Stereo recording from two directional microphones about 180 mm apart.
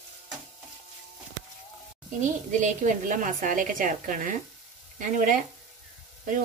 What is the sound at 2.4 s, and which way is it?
A woman's voice, 45° right (ahead or behind).